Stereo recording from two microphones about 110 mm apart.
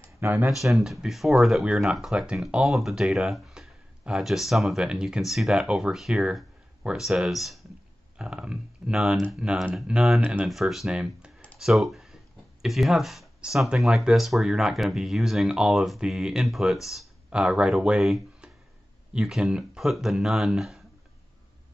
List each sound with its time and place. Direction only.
0.2 s speech: 15° right (ahead or behind)
0.5 s speech: centre (ahead or behind)
10.5 s speech: centre (ahead or behind)
11.5 s a sound: 5° right (ahead or behind)
12.6 s speech: centre (ahead or behind)